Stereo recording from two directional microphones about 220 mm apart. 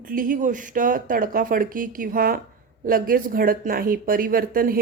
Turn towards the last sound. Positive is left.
turn(degrees=-40)  # may be behind; listen again after turning